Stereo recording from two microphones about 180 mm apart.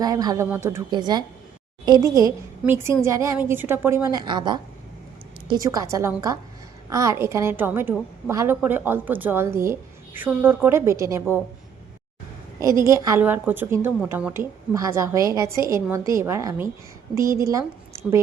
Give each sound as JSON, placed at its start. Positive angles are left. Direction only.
{"t": 0.0, "sound": "a woman's voice", "side_deg": -20}
{"t": 4.2, "sound": "a woman's voice", "side_deg": -25}
{"t": 12.5, "sound": "a woman's voice", "side_deg": -15}